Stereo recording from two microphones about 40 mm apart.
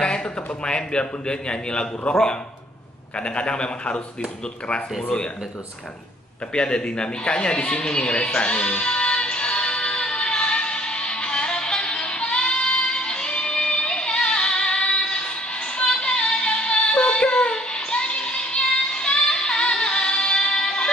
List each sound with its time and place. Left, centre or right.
0.7 s a man's voice: left
3.2 s a man's voice: left
6.5 s a sound: left